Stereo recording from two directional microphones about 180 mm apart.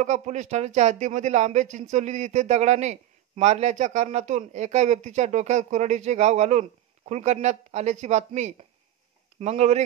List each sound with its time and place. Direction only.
0.0 s speech: 40° right (ahead or behind)